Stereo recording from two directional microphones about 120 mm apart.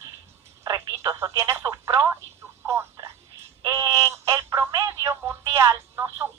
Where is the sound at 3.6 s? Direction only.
30° right (ahead or behind).